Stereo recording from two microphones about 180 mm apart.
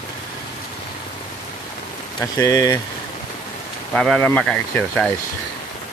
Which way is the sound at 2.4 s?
20° left (ahead or behind).